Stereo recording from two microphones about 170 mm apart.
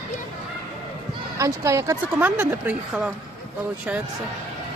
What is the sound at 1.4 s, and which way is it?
Speech, 20° right (ahead or behind).